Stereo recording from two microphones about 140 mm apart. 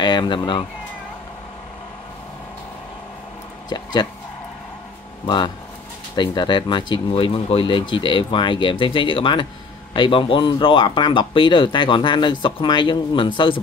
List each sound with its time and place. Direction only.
0.0 s speech: 35° left (ahead or behind)
3.6 s speech: 30° left (ahead or behind)
5.2 s speech: 35° left (ahead or behind)